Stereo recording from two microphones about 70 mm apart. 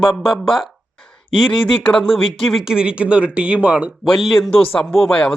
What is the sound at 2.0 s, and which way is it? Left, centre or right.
Speech, centre.